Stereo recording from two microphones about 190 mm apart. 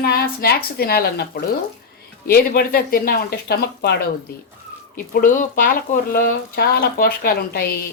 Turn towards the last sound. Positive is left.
turn(degrees=55)  # may be behind; listen again after turning